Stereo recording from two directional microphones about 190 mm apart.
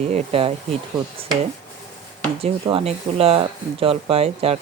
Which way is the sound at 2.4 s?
30° right (ahead or behind).